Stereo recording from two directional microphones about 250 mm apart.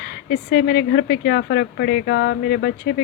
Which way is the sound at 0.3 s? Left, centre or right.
Left.